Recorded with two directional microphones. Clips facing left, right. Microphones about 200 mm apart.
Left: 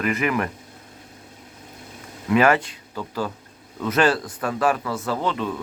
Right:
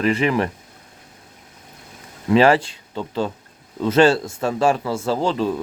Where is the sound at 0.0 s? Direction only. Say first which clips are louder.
Right 4 dB; 30° right (ahead or behind).